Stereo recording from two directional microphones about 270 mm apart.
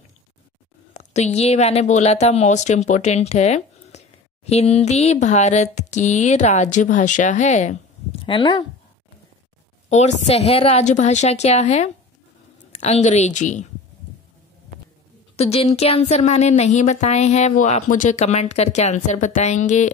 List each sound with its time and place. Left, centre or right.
0.9 s speech: left
9.8 s speech: left
15.3 s speech: left